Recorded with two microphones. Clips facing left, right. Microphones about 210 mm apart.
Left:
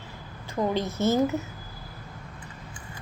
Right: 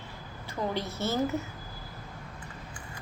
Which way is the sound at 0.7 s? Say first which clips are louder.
Left 8 dB; 20° left (ahead or behind).